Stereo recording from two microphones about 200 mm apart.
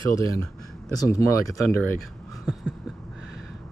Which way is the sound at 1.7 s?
90° right.